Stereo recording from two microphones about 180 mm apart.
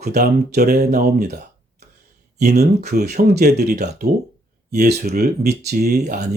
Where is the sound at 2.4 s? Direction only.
60° right (ahead or behind).